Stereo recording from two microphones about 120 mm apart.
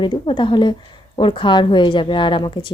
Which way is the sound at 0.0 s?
40° left (ahead or behind).